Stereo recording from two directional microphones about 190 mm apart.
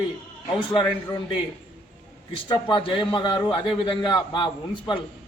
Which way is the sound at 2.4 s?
25° left (ahead or behind).